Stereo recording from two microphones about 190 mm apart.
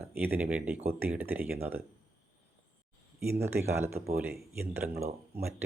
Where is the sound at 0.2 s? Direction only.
10° right (ahead or behind).